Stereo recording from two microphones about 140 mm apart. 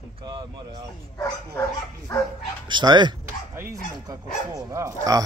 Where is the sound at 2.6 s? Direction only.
30° right (ahead or behind).